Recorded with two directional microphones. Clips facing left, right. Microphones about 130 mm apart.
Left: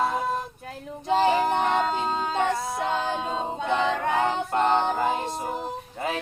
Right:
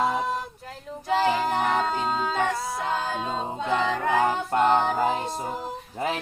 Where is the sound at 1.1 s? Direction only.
25° left (ahead or behind).